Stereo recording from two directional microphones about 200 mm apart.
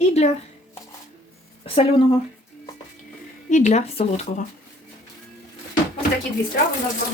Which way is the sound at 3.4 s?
35° left (ahead or behind).